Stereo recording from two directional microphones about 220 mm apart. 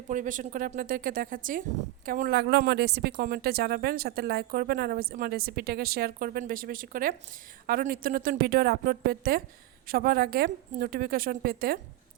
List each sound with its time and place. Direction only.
0.1 s a woman's voice: 35° right (ahead or behind)